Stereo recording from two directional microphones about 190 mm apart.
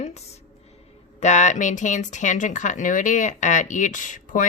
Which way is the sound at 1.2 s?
40° left (ahead or behind).